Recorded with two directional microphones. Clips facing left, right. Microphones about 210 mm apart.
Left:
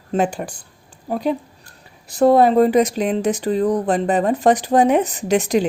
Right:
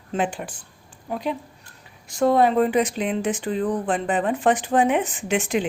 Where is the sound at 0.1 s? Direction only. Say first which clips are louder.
Left 5 dB; 40° left (ahead or behind).